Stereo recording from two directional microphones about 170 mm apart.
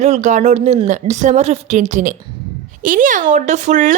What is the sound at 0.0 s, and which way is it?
A woman's voice, 45° right (ahead or behind).